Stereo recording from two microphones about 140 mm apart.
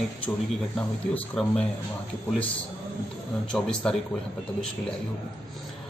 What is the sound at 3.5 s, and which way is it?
Speech, 5° left (ahead or behind).